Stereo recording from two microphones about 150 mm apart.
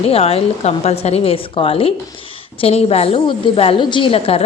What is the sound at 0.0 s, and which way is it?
A woman's voice, 40° left (ahead or behind).